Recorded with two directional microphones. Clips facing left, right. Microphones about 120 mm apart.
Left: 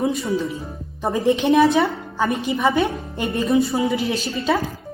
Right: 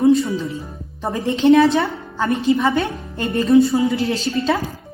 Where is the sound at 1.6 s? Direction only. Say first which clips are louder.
Even; centre (ahead or behind).